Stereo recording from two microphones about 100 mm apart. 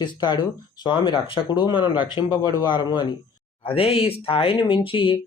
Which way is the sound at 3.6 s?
70° left (ahead or behind).